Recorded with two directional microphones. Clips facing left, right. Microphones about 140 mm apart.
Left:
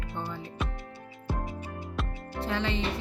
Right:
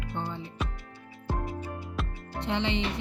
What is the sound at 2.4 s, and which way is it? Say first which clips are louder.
Speech: right 1 dB; 25° right (ahead or behind).